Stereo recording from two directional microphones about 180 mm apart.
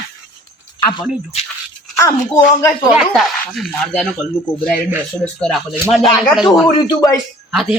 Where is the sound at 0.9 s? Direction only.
35° left (ahead or behind).